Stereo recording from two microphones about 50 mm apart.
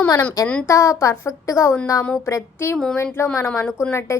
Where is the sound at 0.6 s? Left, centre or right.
Left.